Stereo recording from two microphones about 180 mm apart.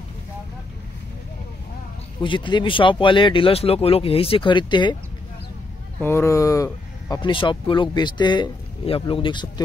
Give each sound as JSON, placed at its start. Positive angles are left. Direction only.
{"t": 2.2, "sound": "speech", "side_deg": 25}
{"t": 5.9, "sound": "speech", "side_deg": 15}